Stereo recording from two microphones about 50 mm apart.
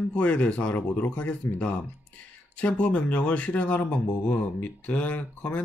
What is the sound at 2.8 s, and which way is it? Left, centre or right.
Speech, left.